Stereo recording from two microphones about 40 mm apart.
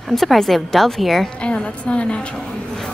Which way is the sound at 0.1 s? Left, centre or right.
Centre.